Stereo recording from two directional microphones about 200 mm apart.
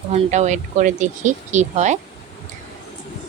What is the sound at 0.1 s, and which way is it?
Speech, 35° right (ahead or behind).